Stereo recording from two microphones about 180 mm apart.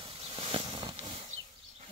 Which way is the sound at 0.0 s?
30° right (ahead or behind).